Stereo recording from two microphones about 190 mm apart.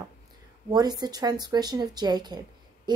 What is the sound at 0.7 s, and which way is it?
A woman's voice, 20° right (ahead or behind).